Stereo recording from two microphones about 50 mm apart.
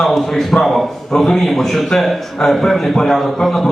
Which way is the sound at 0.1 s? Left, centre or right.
Centre.